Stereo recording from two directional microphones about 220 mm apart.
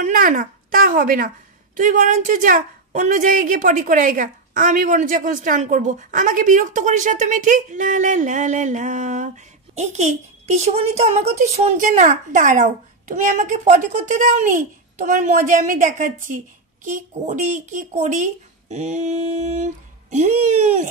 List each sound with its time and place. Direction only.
0.0 s a woman's voice: 35° right (ahead or behind)